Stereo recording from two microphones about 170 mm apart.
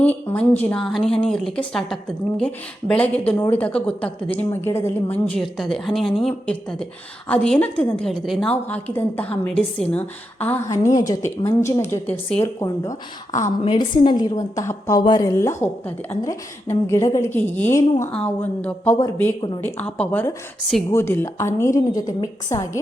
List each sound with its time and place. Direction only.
0.0 s a woman's voice: 10° left (ahead or behind)
10.9 s a woman's voice: 20° left (ahead or behind)
12.5 s a woman's voice: 20° left (ahead or behind)